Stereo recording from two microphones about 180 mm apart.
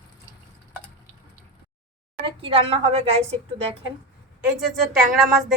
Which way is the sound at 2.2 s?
30° right (ahead or behind).